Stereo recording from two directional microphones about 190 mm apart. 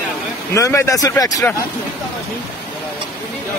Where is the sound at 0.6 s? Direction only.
15° left (ahead or behind).